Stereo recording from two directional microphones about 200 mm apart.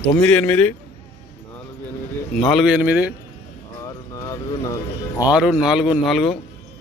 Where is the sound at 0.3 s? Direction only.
5° left (ahead or behind).